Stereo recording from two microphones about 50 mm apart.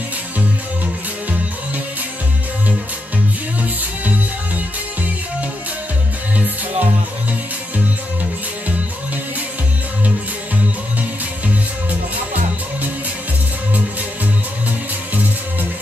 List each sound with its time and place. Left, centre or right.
3.6 s music: right
6.3 s music: right
11.0 s music: right